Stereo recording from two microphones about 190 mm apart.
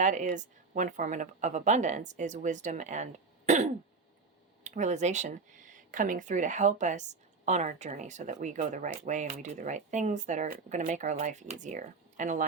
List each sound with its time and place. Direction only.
0.0 s speech: 40° right (ahead or behind)